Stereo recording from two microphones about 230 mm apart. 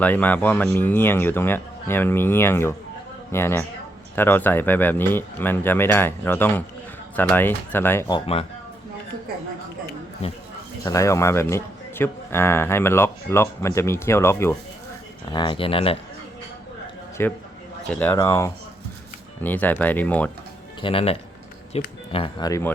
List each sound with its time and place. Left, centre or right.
0.0 s speech: centre
10.8 s speech: centre
17.2 s speech: centre
20.8 s speech: left